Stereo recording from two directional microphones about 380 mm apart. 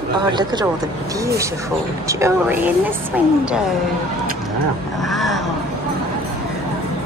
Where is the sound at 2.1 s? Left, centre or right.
Centre.